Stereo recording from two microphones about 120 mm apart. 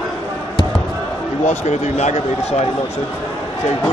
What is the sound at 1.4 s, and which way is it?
Speech, 70° left (ahead or behind).